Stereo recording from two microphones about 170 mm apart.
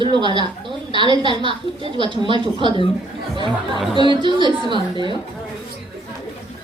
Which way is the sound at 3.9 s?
30° right (ahead or behind).